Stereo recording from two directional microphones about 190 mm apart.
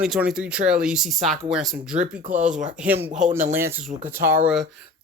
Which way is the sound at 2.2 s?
45° right (ahead or behind).